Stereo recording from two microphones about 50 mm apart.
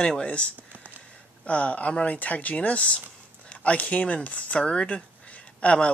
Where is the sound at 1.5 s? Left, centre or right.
Left.